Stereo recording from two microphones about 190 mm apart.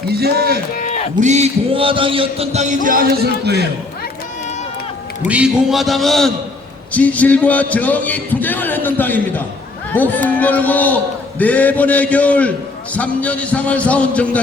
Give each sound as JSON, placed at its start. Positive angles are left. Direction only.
{"t": 0.1, "sound": "speech", "side_deg": -55}
{"t": 0.8, "sound": "a sound", "side_deg": 40}
{"t": 1.2, "sound": "chant", "side_deg": -35}
{"t": 5.3, "sound": "a man's voice", "side_deg": -5}